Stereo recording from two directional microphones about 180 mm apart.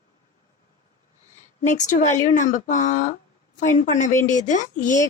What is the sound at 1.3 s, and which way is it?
Speech, 40° left (ahead or behind).